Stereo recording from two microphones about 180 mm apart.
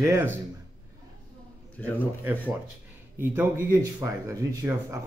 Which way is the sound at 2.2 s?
10° right (ahead or behind).